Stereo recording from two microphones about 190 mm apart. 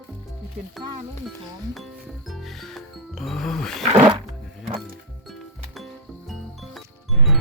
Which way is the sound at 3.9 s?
20° right (ahead or behind).